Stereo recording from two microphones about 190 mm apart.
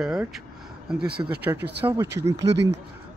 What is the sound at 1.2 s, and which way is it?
Speech, 15° right (ahead or behind).